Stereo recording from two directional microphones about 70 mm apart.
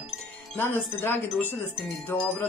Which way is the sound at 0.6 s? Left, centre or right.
Left.